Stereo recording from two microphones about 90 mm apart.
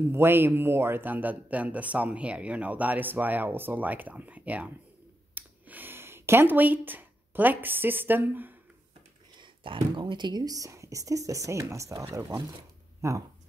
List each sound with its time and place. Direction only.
0.1 s speech: 25° right (ahead or behind)
5.3 s a sound: 20° right (ahead or behind)
9.4 s speech: 60° right (ahead or behind); by 13.2 s 35° right (ahead or behind)